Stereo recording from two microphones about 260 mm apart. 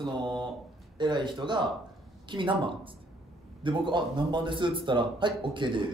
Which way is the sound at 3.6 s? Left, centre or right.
Centre.